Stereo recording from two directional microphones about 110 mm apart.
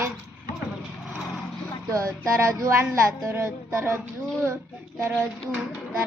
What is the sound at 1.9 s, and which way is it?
A child's voice, 30° right (ahead or behind).